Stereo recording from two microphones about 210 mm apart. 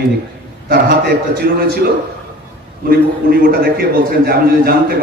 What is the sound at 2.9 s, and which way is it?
A man's voice, 45° right (ahead or behind).